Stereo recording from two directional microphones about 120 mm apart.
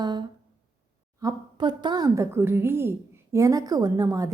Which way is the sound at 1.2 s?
30° right (ahead or behind).